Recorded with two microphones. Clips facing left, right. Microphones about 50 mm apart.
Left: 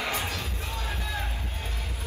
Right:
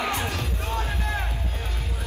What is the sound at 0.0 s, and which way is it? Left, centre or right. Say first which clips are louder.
Music: right 4 dB; right.